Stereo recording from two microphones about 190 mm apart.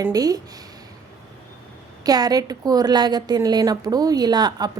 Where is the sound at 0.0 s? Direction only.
20° right (ahead or behind).